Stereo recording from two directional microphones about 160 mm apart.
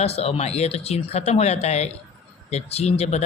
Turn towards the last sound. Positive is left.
turn(degrees=40)  # may be behind; listen again after turning